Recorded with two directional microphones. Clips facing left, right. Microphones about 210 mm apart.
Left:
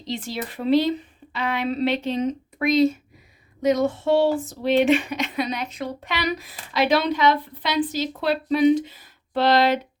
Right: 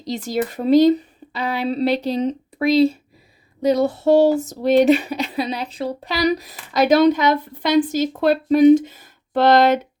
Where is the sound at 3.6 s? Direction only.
35° right (ahead or behind).